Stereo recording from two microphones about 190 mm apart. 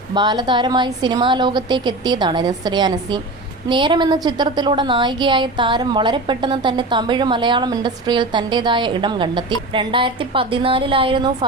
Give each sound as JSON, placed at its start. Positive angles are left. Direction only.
{"t": 0.1, "sound": "a woman's voice", "side_deg": -20}